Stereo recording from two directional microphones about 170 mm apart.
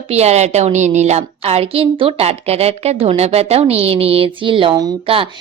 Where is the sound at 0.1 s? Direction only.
40° right (ahead or behind).